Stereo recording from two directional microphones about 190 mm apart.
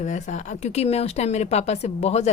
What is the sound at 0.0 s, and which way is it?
Speech, 40° left (ahead or behind).